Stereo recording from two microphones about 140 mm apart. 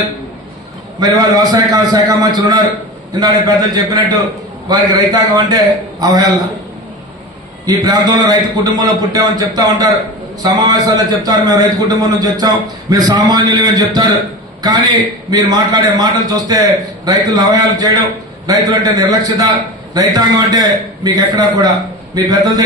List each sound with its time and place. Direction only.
0.9 s a man's voice: 25° right (ahead or behind)
7.6 s a man's voice: 30° right (ahead or behind)